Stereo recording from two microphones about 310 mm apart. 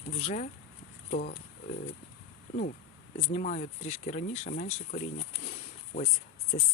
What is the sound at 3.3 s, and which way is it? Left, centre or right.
Speech, left.